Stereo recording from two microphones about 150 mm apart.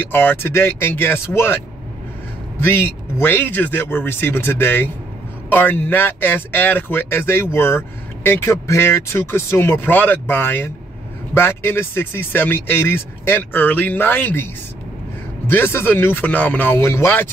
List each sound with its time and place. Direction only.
0.0 s speech: 15° left (ahead or behind)
2.6 s speech: 15° left (ahead or behind)